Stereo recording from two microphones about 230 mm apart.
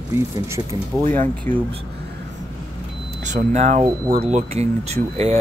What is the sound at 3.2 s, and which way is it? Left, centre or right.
Speech, right.